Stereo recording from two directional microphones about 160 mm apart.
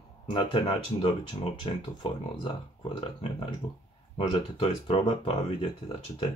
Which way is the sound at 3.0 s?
30° left (ahead or behind).